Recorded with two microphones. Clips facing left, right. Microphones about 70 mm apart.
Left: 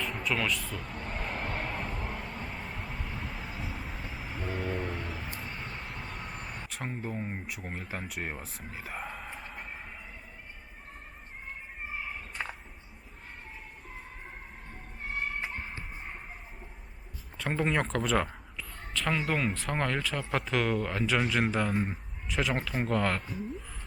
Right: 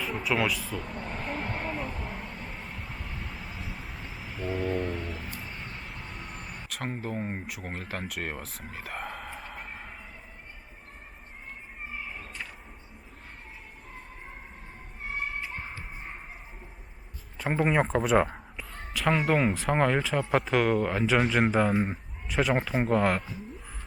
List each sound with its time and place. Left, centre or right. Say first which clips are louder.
0.0 s a sound: right 4 dB; centre
5.4 s vehicle: left 1 dB; centre
7.2 s speech: right 3 dB; centre
7.4 s speech: right 2 dB; centre
8.1 s a sound: right 2 dB; centre
17.5 s speech: right 4 dB; centre